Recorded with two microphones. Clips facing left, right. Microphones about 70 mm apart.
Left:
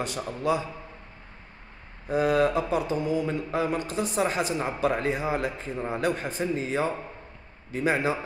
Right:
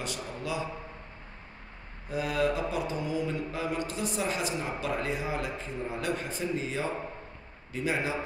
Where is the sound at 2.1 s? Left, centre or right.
Left.